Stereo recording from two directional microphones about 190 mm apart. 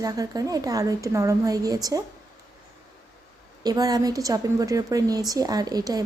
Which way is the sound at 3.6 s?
20° right (ahead or behind).